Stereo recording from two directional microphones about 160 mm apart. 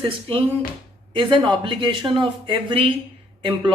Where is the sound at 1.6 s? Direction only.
30° right (ahead or behind).